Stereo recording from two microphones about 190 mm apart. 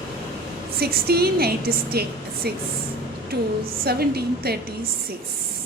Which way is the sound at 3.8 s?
55° right (ahead or behind).